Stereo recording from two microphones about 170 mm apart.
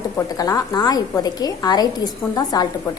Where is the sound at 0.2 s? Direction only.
20° left (ahead or behind).